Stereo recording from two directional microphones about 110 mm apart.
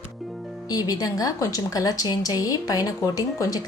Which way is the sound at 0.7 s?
35° left (ahead or behind).